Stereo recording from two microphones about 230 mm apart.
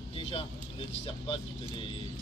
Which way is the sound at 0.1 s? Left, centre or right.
Left.